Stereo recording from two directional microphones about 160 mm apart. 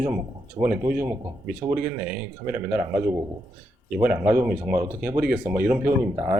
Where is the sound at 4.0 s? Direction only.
15° right (ahead or behind).